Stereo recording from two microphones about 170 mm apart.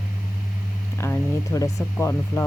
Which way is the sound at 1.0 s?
15° left (ahead or behind).